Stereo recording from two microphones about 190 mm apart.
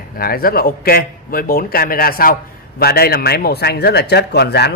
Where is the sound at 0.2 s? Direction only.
50° left (ahead or behind).